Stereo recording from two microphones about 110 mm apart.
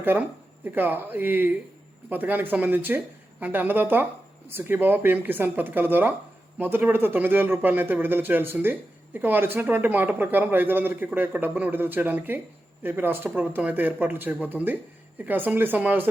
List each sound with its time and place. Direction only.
0.0 s speech: 15° right (ahead or behind)